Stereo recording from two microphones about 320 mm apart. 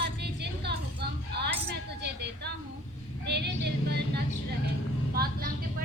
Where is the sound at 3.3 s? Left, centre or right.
Right.